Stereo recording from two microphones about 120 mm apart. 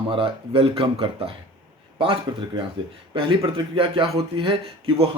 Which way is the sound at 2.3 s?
35° right (ahead or behind).